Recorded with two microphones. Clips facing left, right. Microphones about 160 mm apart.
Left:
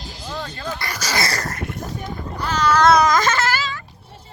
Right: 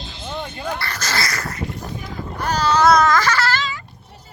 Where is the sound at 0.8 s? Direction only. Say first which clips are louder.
Left 1 dB; 10° left (ahead or behind).